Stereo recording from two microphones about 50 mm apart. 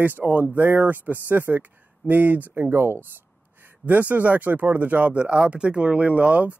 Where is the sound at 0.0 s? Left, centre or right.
Right.